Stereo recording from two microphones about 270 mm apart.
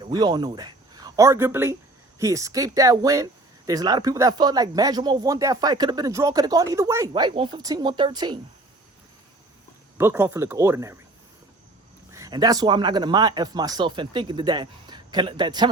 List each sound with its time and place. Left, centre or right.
0.0 s speech: centre
10.0 s speech: centre
12.1 s speech: centre